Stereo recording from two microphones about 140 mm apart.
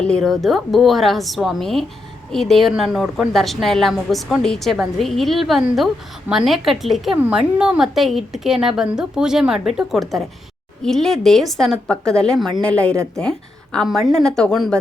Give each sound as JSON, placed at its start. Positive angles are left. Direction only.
{"t": 0.0, "sound": "a woman's voice", "side_deg": 5}